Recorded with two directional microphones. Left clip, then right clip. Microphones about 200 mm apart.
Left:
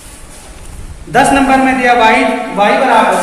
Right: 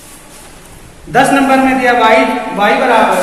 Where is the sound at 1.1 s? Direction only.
20° left (ahead or behind).